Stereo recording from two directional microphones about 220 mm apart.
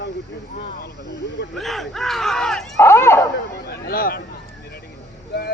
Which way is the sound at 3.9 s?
40° left (ahead or behind).